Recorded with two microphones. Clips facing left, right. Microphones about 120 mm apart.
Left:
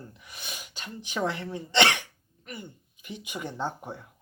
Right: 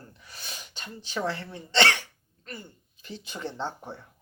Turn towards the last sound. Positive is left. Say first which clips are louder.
# left 1 dB
turn(degrees=10)  # may be behind; listen again after turning